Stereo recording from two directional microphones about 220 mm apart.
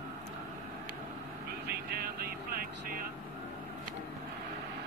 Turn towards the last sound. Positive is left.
turn(degrees=-45)  # may be behind; listen again after turning